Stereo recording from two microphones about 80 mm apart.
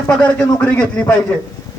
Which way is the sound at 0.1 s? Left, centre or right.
Centre.